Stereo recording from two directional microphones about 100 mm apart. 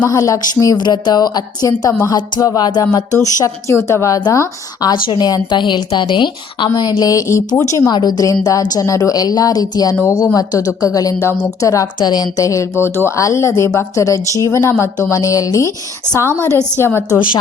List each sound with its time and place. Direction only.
0.1 s a woman's voice: 35° left (ahead or behind)
11.9 s a woman's voice: 45° left (ahead or behind)
16.5 s a woman's voice: 25° right (ahead or behind)